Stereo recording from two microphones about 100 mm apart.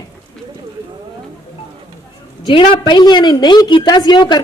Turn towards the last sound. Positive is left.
turn(degrees=45)  # may be behind; listen again after turning